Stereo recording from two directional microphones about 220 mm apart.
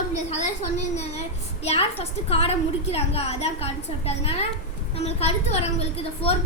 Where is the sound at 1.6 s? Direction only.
25° left (ahead or behind).